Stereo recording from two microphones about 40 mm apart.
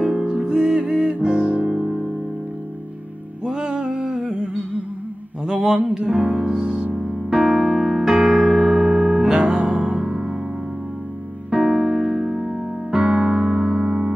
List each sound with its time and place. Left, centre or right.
0.0 s music: right
3.4 s music: right
5.5 s mantra: centre
5.9 s music: right
6.8 s music: right
7.1 s piano: centre
9.4 s music: right
11.5 s music: centre
12.9 s music: right